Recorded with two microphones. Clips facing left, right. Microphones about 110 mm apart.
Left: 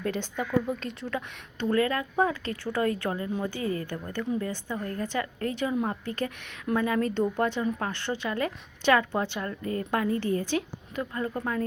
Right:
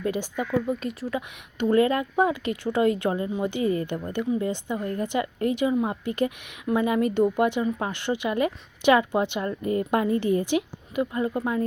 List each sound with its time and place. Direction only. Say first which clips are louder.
0.0 s a woman's voice: right 3 dB; 5° right (ahead or behind)